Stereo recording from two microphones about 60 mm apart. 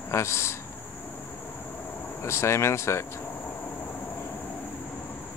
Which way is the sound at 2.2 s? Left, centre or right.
Left.